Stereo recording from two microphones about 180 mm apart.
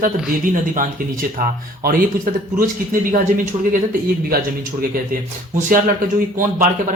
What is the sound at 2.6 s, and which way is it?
A man's voice, 50° right (ahead or behind).